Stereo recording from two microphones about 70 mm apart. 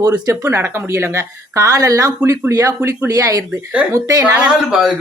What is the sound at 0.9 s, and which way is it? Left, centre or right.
Speech, right.